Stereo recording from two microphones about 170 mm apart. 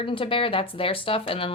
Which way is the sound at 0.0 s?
30° left (ahead or behind).